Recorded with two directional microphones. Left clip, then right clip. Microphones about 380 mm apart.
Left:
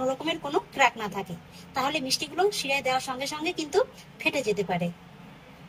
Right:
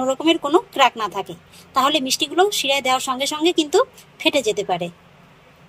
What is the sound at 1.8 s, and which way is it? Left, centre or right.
A woman's voice, centre.